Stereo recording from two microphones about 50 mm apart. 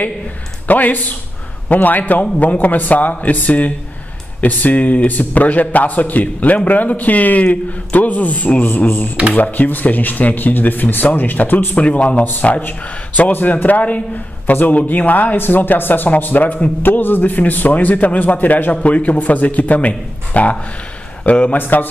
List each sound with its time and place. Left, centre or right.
0.7 s a man's voice: left
11.8 s a man's voice: left